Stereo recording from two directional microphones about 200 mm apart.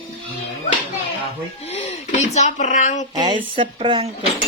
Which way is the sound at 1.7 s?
30° left (ahead or behind).